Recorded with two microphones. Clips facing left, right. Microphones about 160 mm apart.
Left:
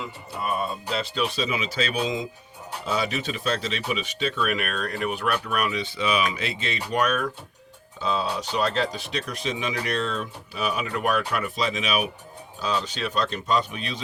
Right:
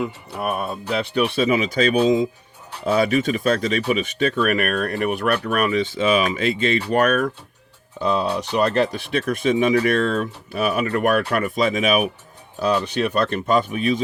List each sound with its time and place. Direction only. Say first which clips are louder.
0.0 s speech: right 6 dB; 60° right (ahead or behind)